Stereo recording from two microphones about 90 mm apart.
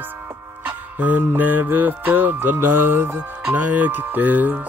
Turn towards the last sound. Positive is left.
turn(degrees=-20)  # may be behind; listen again after turning